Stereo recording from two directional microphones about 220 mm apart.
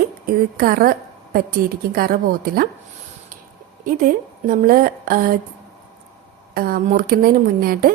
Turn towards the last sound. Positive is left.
turn(degrees=-40)  # may be behind; listen again after turning